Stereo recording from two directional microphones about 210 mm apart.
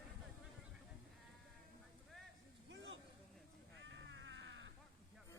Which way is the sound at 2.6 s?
60° right (ahead or behind).